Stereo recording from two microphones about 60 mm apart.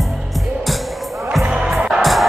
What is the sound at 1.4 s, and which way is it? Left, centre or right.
Music, centre.